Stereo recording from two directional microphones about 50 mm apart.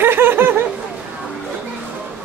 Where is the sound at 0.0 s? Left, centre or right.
Right.